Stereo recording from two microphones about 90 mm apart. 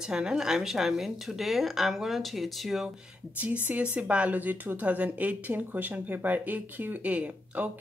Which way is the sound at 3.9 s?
15° right (ahead or behind).